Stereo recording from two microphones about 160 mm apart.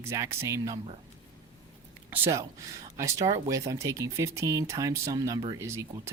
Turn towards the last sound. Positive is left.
turn(degrees=-15)  # may be behind; listen again after turning